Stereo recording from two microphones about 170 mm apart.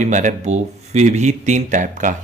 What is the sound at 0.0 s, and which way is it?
Speech, 45° right (ahead or behind).